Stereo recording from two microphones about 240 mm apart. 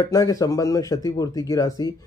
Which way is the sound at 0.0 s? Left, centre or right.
Centre.